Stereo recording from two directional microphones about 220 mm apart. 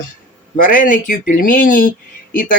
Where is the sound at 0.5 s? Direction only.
40° left (ahead or behind).